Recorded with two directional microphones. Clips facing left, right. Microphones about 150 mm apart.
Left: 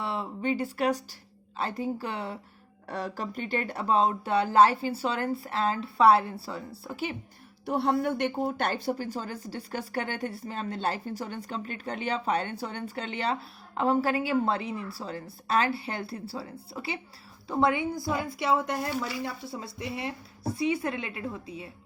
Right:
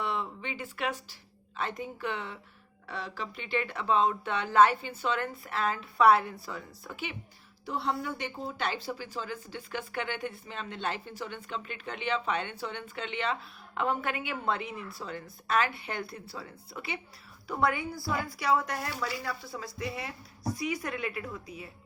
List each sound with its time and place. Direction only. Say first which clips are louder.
0.0 s speech: left 3 dB; 30° left (ahead or behind)
2.8 s speech: left 5 dB; 45° left (ahead or behind)
7.6 s a woman's voice: left 7 dB; 60° left (ahead or behind); by 21.7 s 25° left (ahead or behind)